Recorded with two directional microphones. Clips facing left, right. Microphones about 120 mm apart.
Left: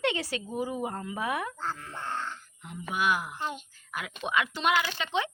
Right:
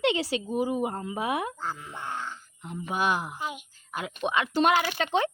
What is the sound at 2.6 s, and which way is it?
Speech, 30° right (ahead or behind).